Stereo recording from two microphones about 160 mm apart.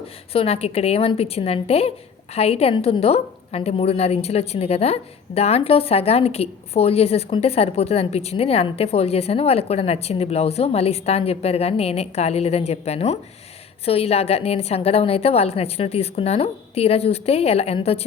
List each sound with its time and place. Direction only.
0.3 s a woman's voice: 40° left (ahead or behind)